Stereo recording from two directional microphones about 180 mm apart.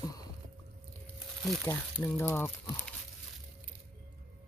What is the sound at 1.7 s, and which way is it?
Speech, 15° left (ahead or behind).